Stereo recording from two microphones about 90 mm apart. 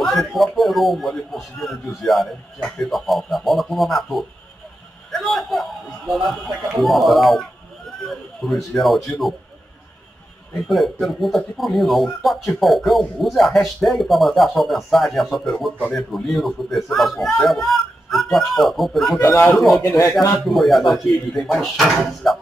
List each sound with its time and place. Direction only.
0.0 s speech: centre (ahead or behind)
10.5 s speech: centre (ahead or behind)
19.1 s a man's voice: 30° left (ahead or behind)
19.5 s speech: centre (ahead or behind)